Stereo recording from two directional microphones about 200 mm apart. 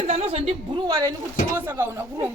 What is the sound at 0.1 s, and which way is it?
Speech, 30° right (ahead or behind).